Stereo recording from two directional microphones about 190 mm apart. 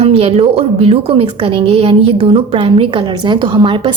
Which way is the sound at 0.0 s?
30° right (ahead or behind).